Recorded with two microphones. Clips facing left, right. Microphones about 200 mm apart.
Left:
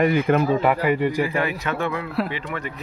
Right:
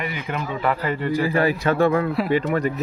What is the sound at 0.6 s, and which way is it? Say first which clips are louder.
Speech: left 3 dB; 15° left (ahead or behind).